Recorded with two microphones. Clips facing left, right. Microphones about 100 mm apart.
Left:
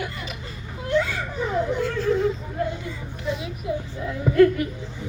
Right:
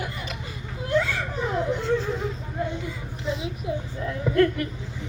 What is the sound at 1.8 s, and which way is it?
Speech, 20° right (ahead or behind).